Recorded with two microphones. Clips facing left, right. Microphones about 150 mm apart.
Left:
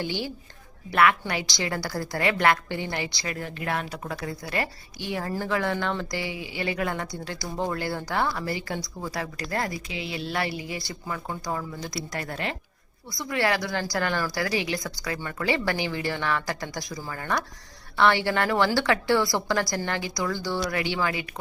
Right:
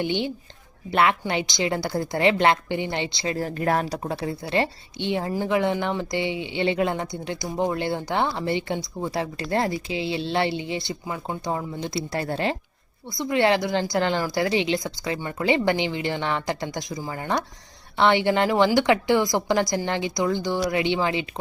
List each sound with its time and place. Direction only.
0.0 s a woman's voice: 20° right (ahead or behind)